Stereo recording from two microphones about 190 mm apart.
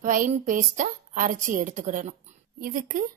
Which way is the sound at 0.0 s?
45° right (ahead or behind).